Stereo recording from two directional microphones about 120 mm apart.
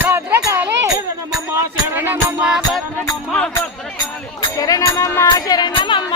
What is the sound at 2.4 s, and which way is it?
Music, 5° right (ahead or behind).